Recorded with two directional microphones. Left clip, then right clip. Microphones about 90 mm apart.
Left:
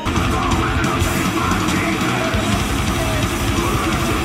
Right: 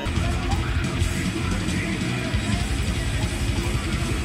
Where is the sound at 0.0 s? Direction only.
35° left (ahead or behind).